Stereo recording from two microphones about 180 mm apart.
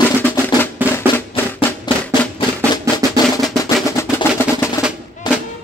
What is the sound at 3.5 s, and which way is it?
Percussion, 20° left (ahead or behind).